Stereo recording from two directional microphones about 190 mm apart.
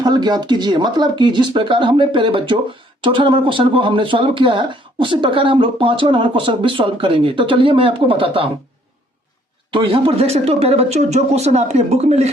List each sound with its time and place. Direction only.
0.0 s speech: 20° right (ahead or behind)
9.7 s speech: 30° right (ahead or behind)